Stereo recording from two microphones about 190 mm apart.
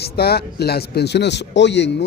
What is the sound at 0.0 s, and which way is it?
A man's voice, 55° left (ahead or behind).